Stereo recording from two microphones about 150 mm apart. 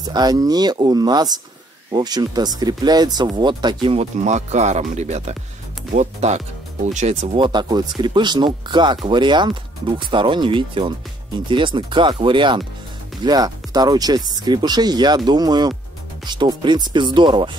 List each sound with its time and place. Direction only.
0.1 s speech: 25° right (ahead or behind)
4.0 s speech: 50° right (ahead or behind)
7.3 s speech: 30° right (ahead or behind)